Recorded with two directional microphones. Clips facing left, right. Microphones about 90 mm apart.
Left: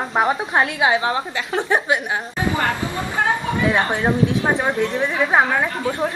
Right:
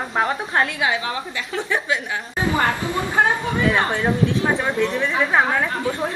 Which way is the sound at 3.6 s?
25° left (ahead or behind).